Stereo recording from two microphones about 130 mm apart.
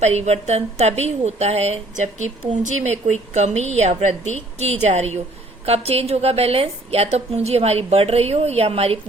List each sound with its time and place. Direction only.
0.0 s a woman's voice: 55° right (ahead or behind)